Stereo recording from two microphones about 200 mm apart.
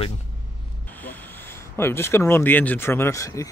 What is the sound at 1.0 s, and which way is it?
Speech, 10° left (ahead or behind).